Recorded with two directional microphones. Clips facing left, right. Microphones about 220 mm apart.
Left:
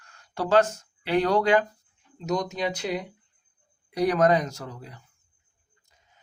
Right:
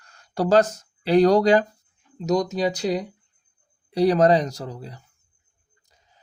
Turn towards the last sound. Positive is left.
turn(degrees=-35)  # may be behind; listen again after turning